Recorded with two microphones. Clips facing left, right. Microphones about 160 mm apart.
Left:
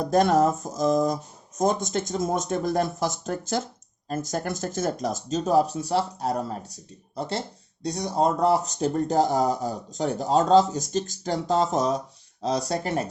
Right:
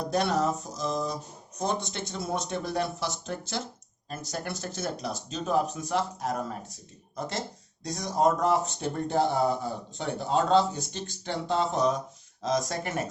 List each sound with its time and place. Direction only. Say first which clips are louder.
0.0 s speech: left 6 dB; 45° left (ahead or behind)